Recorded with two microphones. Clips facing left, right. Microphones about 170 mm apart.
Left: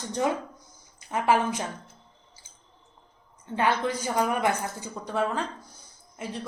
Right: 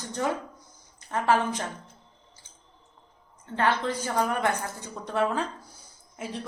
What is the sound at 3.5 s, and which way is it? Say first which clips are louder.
Speech: even; 15° left (ahead or behind).